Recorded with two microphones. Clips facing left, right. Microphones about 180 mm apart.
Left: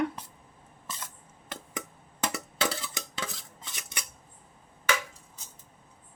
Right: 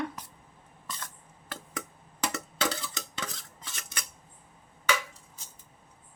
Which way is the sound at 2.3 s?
5° left (ahead or behind).